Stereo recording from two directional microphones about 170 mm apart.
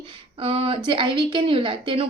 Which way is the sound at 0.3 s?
35° right (ahead or behind).